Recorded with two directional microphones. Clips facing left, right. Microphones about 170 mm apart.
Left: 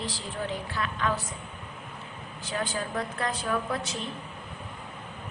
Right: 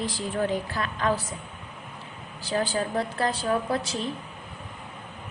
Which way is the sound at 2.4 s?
35° right (ahead or behind).